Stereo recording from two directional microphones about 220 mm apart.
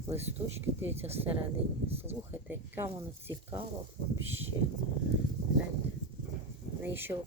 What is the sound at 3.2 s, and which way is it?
Speech, 10° right (ahead or behind).